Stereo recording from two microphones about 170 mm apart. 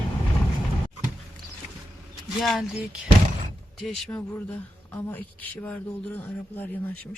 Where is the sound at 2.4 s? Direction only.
Centre (ahead or behind).